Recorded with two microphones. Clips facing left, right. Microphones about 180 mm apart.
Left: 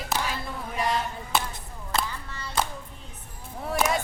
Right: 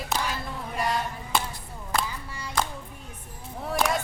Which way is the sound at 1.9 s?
10° right (ahead or behind).